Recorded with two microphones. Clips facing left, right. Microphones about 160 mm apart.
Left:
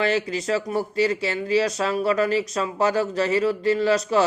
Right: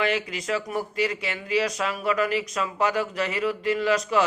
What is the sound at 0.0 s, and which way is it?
Speech, 30° left (ahead or behind).